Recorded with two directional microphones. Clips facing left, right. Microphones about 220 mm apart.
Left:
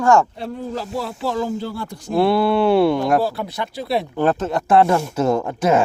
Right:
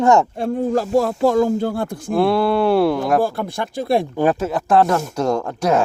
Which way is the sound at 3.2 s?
50° right (ahead or behind).